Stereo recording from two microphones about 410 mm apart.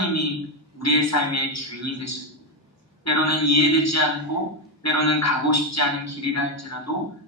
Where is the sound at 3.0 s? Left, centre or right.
Left.